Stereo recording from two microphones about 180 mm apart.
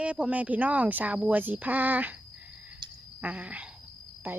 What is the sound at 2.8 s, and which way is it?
Cricket, 25° right (ahead or behind).